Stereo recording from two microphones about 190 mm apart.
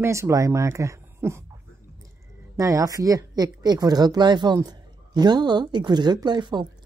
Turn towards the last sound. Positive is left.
turn(degrees=-25)  # may be behind; listen again after turning